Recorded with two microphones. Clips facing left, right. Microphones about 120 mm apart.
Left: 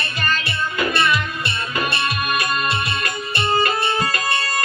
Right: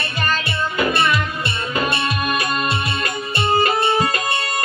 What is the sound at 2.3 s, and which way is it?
Music, 30° right (ahead or behind).